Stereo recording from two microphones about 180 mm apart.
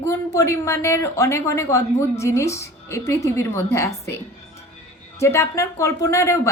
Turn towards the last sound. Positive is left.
turn(degrees=15)  # may be behind; listen again after turning